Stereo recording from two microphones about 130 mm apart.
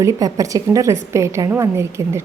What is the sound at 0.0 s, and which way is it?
A woman's voice, 25° right (ahead or behind).